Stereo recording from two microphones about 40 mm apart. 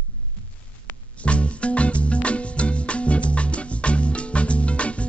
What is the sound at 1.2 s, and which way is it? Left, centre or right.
Music, left.